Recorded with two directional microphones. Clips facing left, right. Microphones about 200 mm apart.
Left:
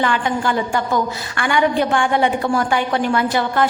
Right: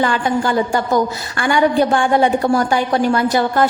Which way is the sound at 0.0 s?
35° right (ahead or behind).